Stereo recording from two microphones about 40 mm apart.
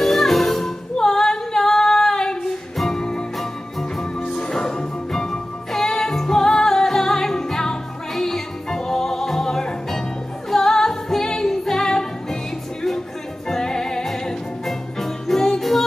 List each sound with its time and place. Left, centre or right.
0.0 s music: centre
0.9 s female singing: centre
2.9 s music: centre
13.5 s music: centre